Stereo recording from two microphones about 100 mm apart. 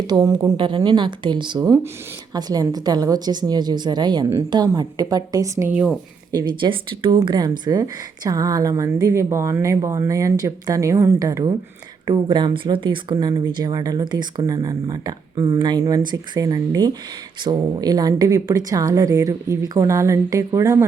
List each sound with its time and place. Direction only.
0.1 s a woman's voice: 40° right (ahead or behind)
0.5 s a woman's voice: 55° right (ahead or behind)
1.6 s a woman's voice: 35° right (ahead or behind)
6.3 s a woman's voice: 50° right (ahead or behind)
7.2 s a woman's voice: 45° right (ahead or behind)
13.1 s a woman's voice: 40° right (ahead or behind)